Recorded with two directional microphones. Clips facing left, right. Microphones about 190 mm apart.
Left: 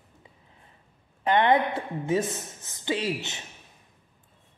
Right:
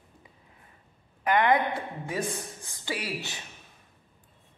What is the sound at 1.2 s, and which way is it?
A woman's voice, 25° left (ahead or behind).